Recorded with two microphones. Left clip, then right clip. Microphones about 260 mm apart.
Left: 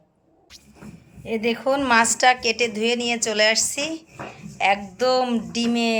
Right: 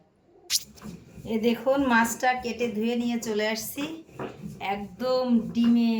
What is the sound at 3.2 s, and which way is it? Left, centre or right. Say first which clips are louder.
Speech: left 9 dB; left.